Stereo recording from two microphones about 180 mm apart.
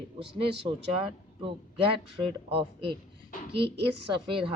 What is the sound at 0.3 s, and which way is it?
Speech, 30° right (ahead or behind).